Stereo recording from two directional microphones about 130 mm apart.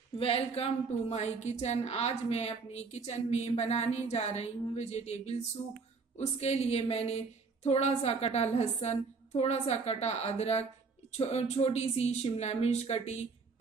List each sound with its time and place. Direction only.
0.2 s a woman's voice: 50° left (ahead or behind)